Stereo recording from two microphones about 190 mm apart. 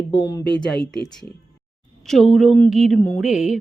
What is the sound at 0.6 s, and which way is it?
Speech, 5° left (ahead or behind).